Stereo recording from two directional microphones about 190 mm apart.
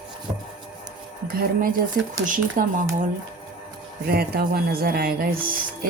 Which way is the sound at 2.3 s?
45° right (ahead or behind).